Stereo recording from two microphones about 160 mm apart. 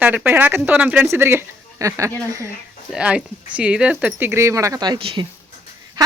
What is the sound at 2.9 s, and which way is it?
A woman's voice, 5° right (ahead or behind).